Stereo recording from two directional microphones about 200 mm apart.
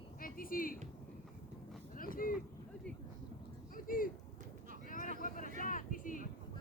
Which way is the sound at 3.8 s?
45° left (ahead or behind).